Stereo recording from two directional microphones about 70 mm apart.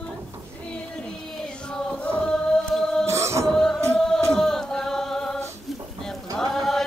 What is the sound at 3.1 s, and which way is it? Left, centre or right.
Music, right.